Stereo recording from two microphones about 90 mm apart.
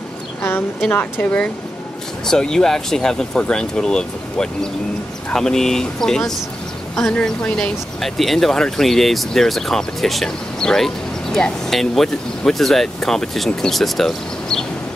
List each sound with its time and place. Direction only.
0.4 s a woman's voice: 25° left (ahead or behind)
2.2 s speech: 5° left (ahead or behind)